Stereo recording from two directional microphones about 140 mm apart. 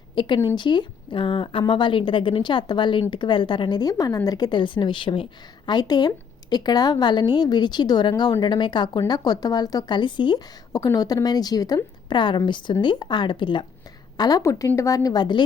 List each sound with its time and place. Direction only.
0.2 s a woman's voice: 35° left (ahead or behind)